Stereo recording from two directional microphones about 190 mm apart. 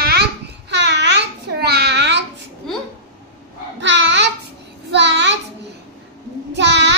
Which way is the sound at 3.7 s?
70° right (ahead or behind).